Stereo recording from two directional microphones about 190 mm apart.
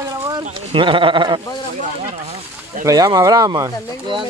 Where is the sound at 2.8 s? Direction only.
20° right (ahead or behind).